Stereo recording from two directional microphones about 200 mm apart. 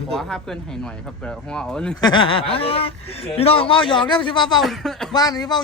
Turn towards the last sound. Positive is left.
turn(degrees=20)  # may be behind; listen again after turning